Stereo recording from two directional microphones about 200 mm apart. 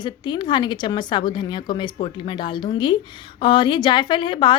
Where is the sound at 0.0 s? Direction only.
20° left (ahead or behind).